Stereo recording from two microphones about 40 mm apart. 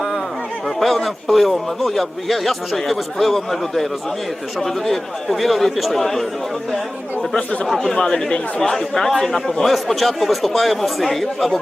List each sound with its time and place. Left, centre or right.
0.8 s a man's voice: centre
7.7 s a man's voice: centre
7.9 s a man's voice: centre